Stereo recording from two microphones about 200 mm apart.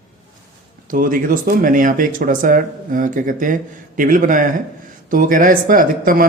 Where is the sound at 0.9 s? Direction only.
45° right (ahead or behind).